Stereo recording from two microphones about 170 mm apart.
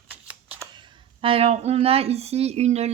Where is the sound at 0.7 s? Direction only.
25° right (ahead or behind).